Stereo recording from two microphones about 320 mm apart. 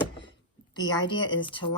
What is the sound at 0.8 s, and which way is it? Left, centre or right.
Speech, centre.